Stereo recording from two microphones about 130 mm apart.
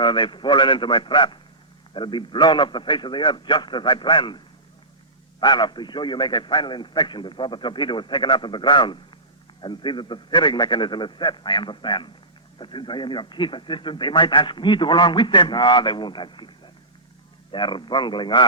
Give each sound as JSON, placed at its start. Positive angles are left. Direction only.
{"t": 0.0, "sound": "a man's voice", "side_deg": 40}
{"t": 5.4, "sound": "a man's voice", "side_deg": 35}
{"t": 17.5, "sound": "a man's voice", "side_deg": 40}